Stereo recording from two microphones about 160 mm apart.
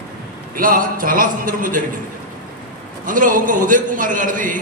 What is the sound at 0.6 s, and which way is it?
A man's voice, 60° right (ahead or behind).